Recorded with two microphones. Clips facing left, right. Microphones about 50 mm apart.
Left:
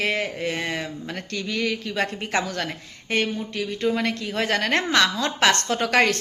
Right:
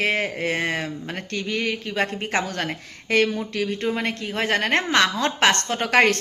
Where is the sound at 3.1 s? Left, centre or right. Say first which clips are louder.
Right 4 dB; right.